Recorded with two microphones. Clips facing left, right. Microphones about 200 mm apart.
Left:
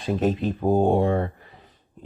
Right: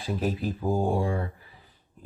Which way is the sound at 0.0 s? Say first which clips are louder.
Left 6 dB; 75° left (ahead or behind).